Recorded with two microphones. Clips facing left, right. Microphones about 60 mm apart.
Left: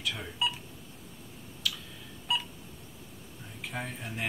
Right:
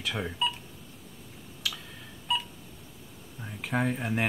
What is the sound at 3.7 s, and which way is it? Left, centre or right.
Speech, right.